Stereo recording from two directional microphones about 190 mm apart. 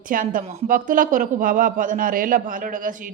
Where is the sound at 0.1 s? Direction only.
45° right (ahead or behind).